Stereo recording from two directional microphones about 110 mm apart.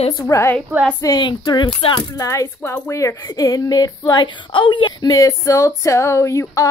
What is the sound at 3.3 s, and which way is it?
Speech, 35° left (ahead or behind).